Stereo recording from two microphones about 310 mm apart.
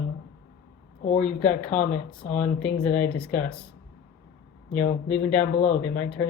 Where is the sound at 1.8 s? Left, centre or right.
Left.